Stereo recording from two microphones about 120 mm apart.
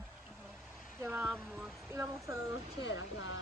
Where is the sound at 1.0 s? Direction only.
20° right (ahead or behind).